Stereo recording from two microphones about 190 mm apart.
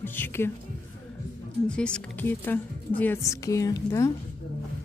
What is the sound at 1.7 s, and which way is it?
Speech, 5° left (ahead or behind).